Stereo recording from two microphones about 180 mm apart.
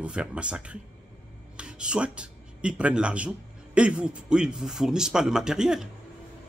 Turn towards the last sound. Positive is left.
turn(degrees=-5)  # may be behind; listen again after turning